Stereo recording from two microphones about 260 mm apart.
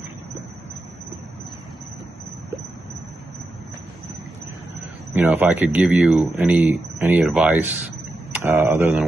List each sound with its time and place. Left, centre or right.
5.1 s speech: centre